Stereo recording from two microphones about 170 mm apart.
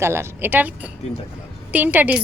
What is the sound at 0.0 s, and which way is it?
A woman's voice, 15° right (ahead or behind).